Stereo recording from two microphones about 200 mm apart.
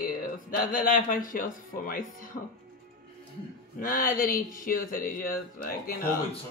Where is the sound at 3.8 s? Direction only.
45° left (ahead or behind).